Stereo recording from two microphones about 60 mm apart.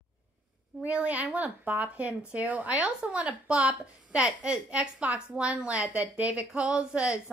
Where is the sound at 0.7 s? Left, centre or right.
Centre.